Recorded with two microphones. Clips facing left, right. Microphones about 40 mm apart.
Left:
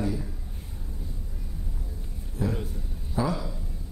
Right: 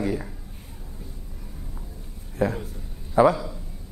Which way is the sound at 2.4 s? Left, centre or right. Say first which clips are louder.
Right 5 dB; right.